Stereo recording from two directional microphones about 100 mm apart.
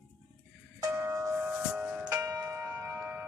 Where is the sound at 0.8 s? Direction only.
30° right (ahead or behind); by 2.0 s 15° right (ahead or behind).